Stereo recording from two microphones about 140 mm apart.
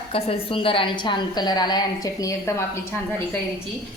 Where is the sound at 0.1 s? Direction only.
40° left (ahead or behind).